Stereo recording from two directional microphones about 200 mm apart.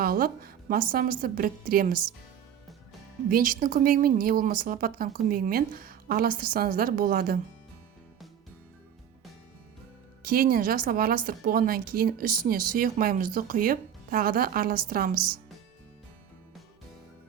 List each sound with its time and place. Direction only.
0.0 s a woman's voice: 45° right (ahead or behind)
3.2 s a woman's voice: 45° right (ahead or behind)
10.2 s a woman's voice: 50° right (ahead or behind)